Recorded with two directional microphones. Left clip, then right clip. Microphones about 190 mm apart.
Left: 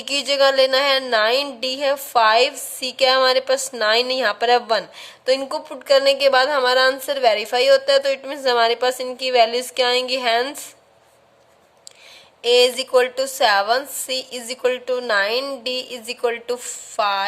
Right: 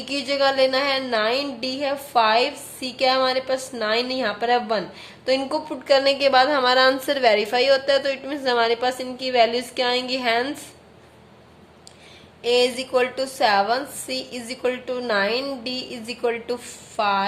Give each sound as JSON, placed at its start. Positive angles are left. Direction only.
{"t": 0.0, "sound": "a woman's voice", "side_deg": 50}
{"t": 12.4, "sound": "a woman's voice", "side_deg": 50}